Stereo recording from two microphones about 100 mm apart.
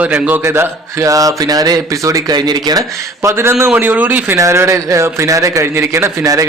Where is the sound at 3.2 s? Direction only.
25° right (ahead or behind).